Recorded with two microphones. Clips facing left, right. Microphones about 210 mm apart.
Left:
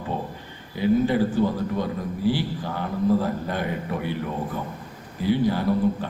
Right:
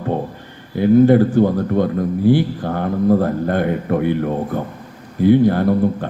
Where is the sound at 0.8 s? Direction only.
55° right (ahead or behind).